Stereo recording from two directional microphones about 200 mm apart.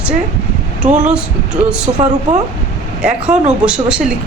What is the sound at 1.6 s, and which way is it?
Speech, 5° right (ahead or behind).